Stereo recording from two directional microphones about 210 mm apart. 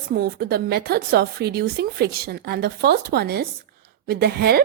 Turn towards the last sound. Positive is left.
turn(degrees=-50)  # may be behind; listen again after turning